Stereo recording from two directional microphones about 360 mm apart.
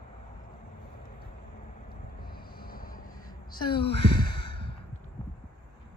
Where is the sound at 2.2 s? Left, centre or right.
Left.